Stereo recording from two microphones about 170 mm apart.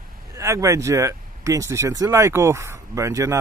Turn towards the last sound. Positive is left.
turn(degrees=-15)  # may be behind; listen again after turning